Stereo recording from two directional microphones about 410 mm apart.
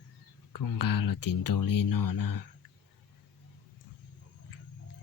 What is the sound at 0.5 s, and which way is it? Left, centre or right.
Speech, left.